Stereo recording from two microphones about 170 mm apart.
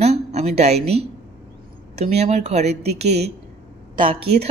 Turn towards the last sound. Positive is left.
turn(degrees=-35)  # may be behind; listen again after turning